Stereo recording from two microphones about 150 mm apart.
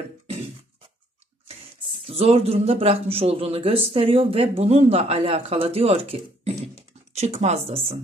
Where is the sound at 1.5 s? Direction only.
40° right (ahead or behind).